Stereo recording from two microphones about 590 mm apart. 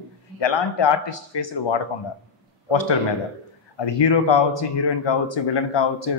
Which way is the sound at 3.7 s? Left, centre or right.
Left.